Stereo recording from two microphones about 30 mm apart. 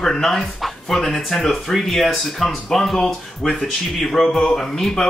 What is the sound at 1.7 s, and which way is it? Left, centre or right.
Speech, centre.